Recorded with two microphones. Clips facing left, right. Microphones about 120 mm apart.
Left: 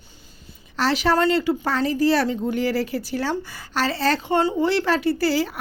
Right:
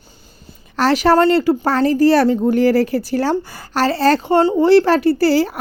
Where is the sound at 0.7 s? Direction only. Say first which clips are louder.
Right 7 dB; 50° right (ahead or behind).